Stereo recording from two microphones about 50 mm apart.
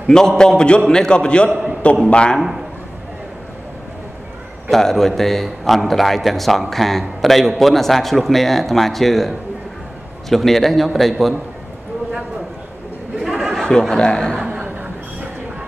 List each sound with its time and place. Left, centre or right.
0.0 s a man's voice: centre
4.6 s a man's voice: centre
10.3 s a man's voice: centre
13.2 s a sound: centre
13.7 s speech: centre